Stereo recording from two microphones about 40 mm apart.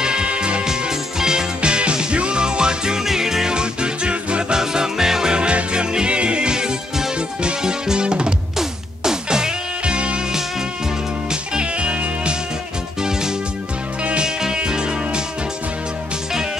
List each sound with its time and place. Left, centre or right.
0.0 s music: right
0.7 s music: centre
3.5 s music: right
11.2 s music: right
14.2 s music: centre